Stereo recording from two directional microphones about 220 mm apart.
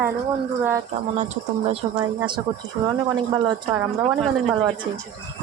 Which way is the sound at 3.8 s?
Centre (ahead or behind).